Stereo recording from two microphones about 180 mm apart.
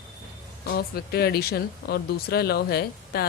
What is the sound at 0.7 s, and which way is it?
Speech, 60° left (ahead or behind).